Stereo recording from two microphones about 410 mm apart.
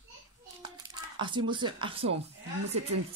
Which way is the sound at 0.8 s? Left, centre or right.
Centre.